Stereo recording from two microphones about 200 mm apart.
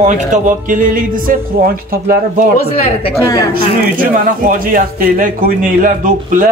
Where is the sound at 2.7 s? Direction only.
30° left (ahead or behind).